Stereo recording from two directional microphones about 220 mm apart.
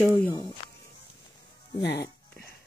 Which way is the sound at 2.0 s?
10° left (ahead or behind).